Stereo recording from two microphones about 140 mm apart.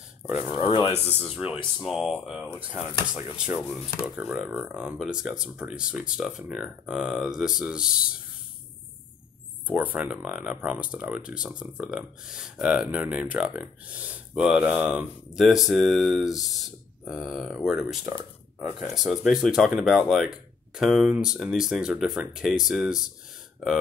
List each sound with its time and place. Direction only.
0.6 s speech: 40° left (ahead or behind)
1.3 s speech: 5° right (ahead or behind)
9.7 s speech: 10° right (ahead or behind)